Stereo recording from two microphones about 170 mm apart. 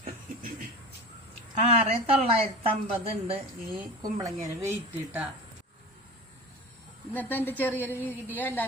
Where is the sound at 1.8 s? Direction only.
35° right (ahead or behind).